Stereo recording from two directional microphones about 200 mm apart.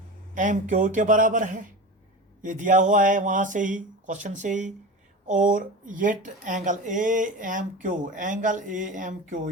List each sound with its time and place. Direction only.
0.3 s speech: 40° right (ahead or behind)